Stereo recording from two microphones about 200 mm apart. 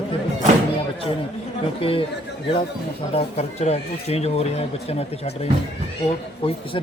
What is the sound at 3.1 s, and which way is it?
Speech, 30° left (ahead or behind).